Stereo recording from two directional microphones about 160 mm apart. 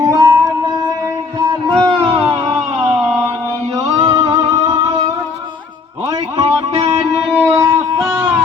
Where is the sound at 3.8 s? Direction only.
20° right (ahead or behind).